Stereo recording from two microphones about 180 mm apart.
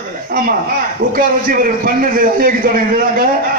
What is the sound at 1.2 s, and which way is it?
A man's voice, 50° right (ahead or behind).